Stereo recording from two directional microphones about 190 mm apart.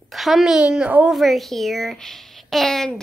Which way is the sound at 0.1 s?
Centre (ahead or behind).